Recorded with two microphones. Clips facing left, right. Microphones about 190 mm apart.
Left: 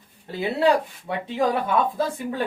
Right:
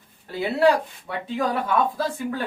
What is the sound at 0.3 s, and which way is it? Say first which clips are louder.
Speech: right 1 dB; 20° left (ahead or behind).